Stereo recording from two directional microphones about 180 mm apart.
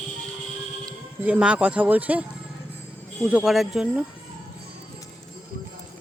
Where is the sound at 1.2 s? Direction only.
5° right (ahead or behind).